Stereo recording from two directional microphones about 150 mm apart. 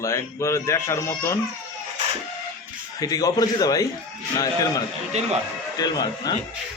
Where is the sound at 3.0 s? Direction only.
25° left (ahead or behind).